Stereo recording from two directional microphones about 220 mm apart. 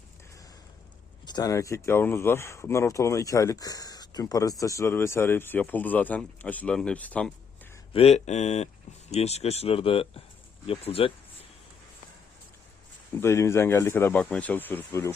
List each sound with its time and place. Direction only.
1.2 s speech: 20° left (ahead or behind)
7.9 s speech: 30° left (ahead or behind)
13.1 s speech: 10° left (ahead or behind)